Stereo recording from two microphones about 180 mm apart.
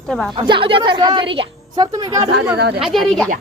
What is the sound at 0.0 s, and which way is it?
Speech, 5° left (ahead or behind).